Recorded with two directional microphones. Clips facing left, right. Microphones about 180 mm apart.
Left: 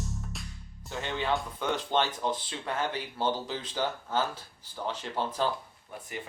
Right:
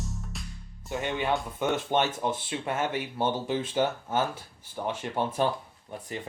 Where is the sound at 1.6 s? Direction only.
20° right (ahead or behind).